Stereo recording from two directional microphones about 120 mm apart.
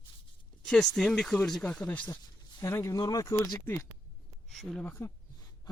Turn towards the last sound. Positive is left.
turn(degrees=20)  # may be behind; listen again after turning